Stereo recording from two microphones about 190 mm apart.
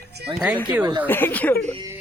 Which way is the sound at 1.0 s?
10° left (ahead or behind).